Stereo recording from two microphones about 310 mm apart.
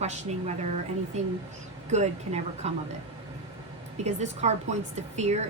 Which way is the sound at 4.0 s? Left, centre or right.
Right.